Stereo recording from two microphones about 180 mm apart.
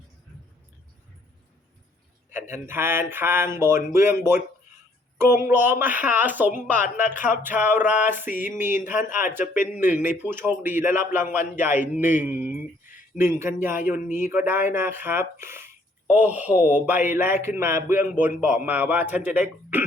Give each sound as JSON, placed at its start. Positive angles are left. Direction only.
{"t": 2.3, "sound": "speech", "side_deg": -15}
{"t": 6.7, "sound": "speech", "side_deg": 45}
{"t": 7.2, "sound": "speech", "side_deg": -10}
{"t": 12.5, "sound": "a sound", "side_deg": 50}
{"t": 13.1, "sound": "speech", "side_deg": -15}